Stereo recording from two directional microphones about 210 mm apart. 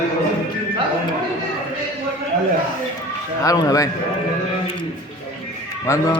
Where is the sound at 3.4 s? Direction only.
15° left (ahead or behind).